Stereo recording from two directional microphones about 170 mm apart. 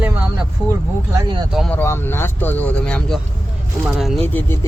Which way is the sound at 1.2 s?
25° right (ahead or behind).